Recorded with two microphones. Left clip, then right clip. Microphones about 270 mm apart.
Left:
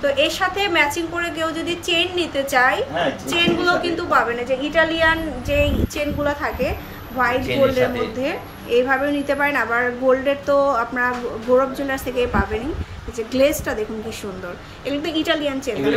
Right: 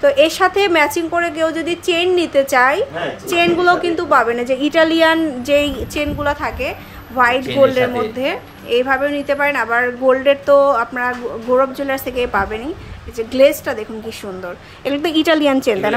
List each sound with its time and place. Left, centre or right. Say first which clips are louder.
0.0 s a woman's voice: right 6 dB; centre
5.9 s a woman's voice: right 6 dB; centre
14.9 s a woman's voice: right 6 dB; centre